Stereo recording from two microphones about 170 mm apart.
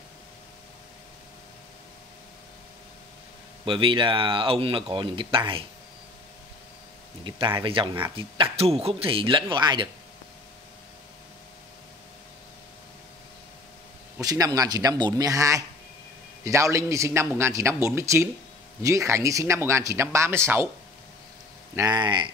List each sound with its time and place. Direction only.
3.6 s speech: 30° right (ahead or behind)
7.2 s speech: 30° right (ahead or behind)
14.1 s speech: 20° right (ahead or behind)
21.7 s speech: 25° right (ahead or behind)